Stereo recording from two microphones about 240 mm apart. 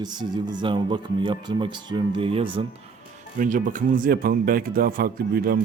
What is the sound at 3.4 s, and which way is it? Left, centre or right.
A man's voice, right.